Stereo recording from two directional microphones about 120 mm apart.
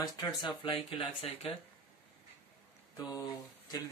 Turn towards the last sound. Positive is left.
turn(degrees=30)  # may be behind; listen again after turning